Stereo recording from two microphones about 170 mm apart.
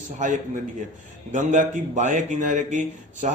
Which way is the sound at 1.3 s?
45° right (ahead or behind).